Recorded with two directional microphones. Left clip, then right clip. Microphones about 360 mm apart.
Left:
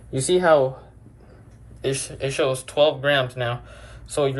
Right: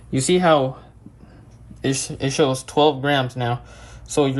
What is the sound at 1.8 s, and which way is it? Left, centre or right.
Speech, centre.